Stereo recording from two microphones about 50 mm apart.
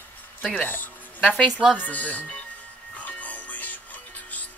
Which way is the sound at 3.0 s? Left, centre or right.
Left.